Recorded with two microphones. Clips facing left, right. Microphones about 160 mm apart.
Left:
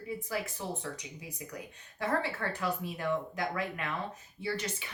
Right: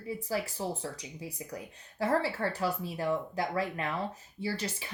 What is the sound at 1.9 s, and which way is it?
Speech, 35° right (ahead or behind).